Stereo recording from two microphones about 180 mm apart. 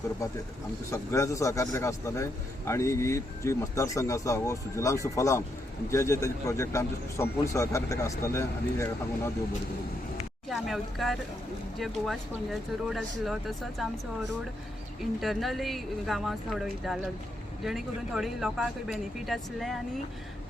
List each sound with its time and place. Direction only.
0.9 s speech: 15° left (ahead or behind)
10.5 s speech: centre (ahead or behind)
15.2 s speech: centre (ahead or behind)